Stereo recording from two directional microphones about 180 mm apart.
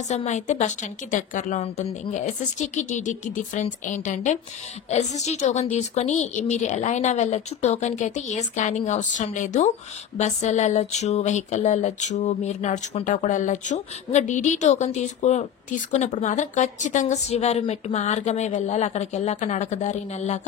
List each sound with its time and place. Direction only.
0.1 s speech: 40° left (ahead or behind)